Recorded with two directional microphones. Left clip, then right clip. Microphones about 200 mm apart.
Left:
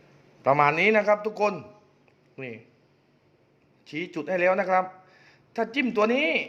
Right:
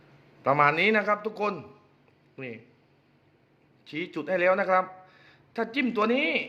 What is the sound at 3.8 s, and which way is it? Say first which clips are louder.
A man's voice: left 1 dB; 5° left (ahead or behind).